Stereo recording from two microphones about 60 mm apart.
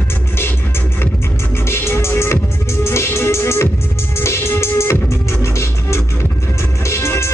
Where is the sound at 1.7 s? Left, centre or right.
Left.